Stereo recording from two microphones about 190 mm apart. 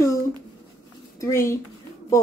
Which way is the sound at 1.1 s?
15° left (ahead or behind).